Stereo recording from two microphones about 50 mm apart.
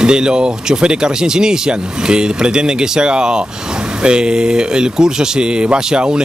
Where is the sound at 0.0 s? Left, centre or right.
Centre.